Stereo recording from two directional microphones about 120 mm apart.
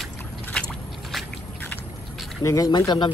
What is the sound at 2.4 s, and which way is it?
Speech, 30° left (ahead or behind).